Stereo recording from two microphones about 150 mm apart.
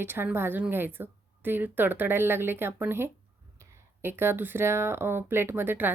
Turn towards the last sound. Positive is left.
turn(degrees=-15)  # may be behind; listen again after turning